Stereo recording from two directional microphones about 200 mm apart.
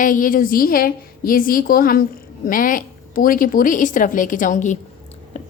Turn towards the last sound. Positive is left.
turn(degrees=40)  # may be behind; listen again after turning